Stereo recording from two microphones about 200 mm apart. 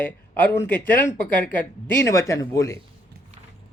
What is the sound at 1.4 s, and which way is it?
A man's voice, 10° left (ahead or behind).